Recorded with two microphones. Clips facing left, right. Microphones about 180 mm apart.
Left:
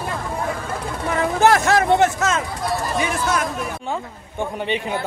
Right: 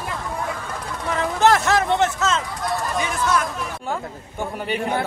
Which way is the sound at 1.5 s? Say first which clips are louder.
Left 1 dB; 55° left (ahead or behind).